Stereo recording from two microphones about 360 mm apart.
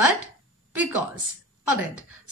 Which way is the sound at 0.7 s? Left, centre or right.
Centre.